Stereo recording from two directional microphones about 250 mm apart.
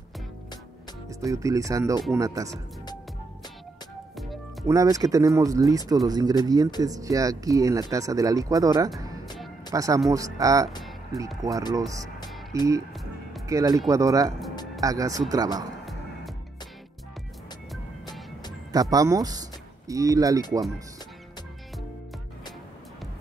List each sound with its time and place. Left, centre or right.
1.2 s speech: centre
4.6 s speech: centre
15.8 s music: centre
18.7 s speech: centre